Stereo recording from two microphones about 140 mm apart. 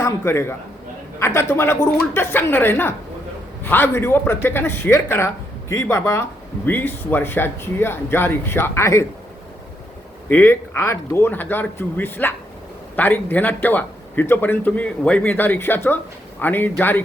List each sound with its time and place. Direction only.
0.0 s a man's voice: 20° left (ahead or behind)
10.2 s a man's voice: 15° left (ahead or behind)